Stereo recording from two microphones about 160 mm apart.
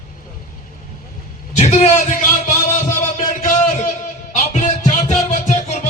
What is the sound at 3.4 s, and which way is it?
Music, 50° left (ahead or behind).